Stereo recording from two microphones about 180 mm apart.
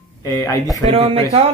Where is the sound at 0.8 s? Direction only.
30° right (ahead or behind).